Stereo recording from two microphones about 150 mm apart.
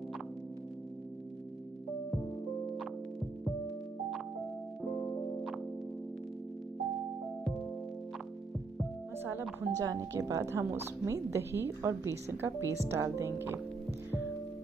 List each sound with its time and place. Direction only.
2.0 s music: centre (ahead or behind)
4.9 s music: 5° left (ahead or behind)
9.2 s speech: 15° right (ahead or behind)